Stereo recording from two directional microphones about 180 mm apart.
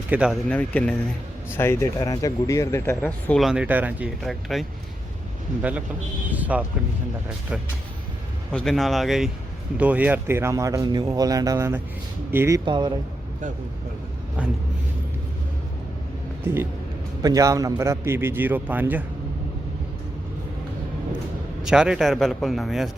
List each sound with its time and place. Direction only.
0.1 s a man's voice: 5° right (ahead or behind)
0.4 s speech: 5° left (ahead or behind)
3.4 s a man's voice: 5° right (ahead or behind)
6.3 s speech: 10° right (ahead or behind)
8.5 s a man's voice: centre (ahead or behind); by 12.9 s 25° right (ahead or behind)
14.4 s speech: 5° right (ahead or behind)
17.2 s speech: 20° right (ahead or behind)
21.6 s a man's voice: 5° right (ahead or behind)